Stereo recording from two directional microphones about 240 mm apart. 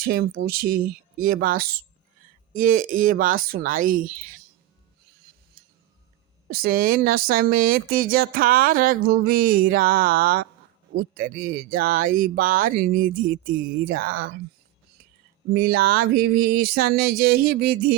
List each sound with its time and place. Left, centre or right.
0.0 s speech: right
6.5 s speech: right
15.5 s speech: right